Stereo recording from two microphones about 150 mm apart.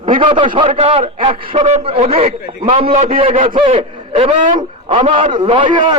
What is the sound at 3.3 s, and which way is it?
Speech, 60° right (ahead or behind).